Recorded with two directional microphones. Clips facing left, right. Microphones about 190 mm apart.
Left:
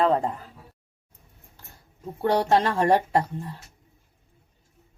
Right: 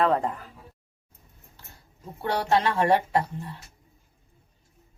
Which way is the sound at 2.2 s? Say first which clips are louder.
Left 3 dB; 45° left (ahead or behind).